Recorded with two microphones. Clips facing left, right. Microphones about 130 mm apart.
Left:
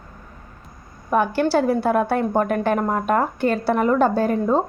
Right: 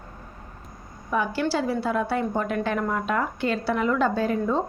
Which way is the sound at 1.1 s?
55° left (ahead or behind).